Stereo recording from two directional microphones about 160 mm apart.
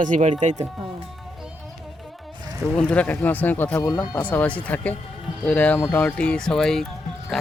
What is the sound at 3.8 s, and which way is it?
Speech, 20° left (ahead or behind).